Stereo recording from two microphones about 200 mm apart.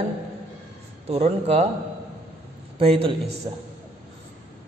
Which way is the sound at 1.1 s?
30° right (ahead or behind).